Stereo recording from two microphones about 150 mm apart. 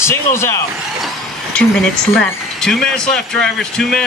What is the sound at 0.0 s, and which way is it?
Speech, 15° left (ahead or behind).